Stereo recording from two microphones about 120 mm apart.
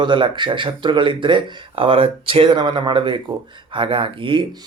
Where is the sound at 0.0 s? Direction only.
40° right (ahead or behind).